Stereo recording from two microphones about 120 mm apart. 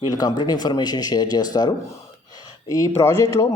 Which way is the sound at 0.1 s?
35° left (ahead or behind).